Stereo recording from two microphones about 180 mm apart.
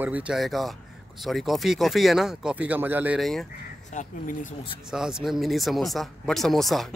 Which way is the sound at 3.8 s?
45° left (ahead or behind).